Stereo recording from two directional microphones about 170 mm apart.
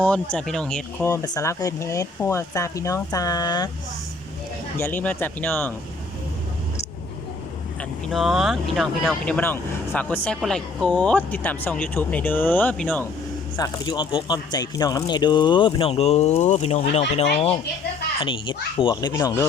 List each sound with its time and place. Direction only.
0.0 s speech: 5° left (ahead or behind)
1.1 s speech: 20° left (ahead or behind)
4.8 s speech: 10° left (ahead or behind)
8.1 s speech: centre (ahead or behind)
13.6 s speech: 25° left (ahead or behind)